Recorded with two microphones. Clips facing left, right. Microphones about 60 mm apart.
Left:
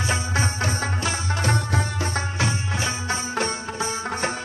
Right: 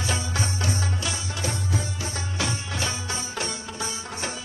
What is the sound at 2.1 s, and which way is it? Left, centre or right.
Music, left.